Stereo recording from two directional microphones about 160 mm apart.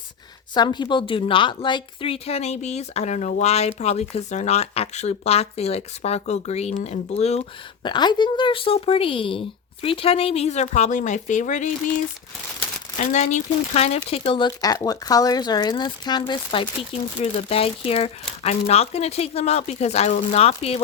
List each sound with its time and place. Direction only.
0.5 s speech: 25° left (ahead or behind)
7.9 s speech: 30° left (ahead or behind); by 11.7 s 50° left (ahead or behind)
13.0 s speech: 50° left (ahead or behind)